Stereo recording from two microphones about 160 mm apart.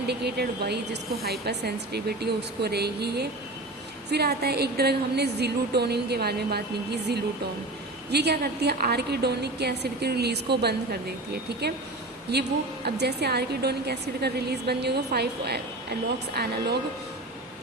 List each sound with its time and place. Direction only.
0.1 s a woman's voice: 90° right